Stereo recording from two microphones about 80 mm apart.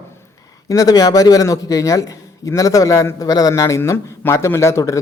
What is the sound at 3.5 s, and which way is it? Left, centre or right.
Speech, left.